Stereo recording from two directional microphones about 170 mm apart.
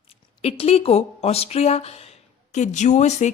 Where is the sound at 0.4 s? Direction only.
35° left (ahead or behind).